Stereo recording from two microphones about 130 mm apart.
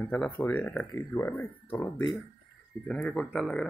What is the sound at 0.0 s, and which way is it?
Speech, 15° left (ahead or behind).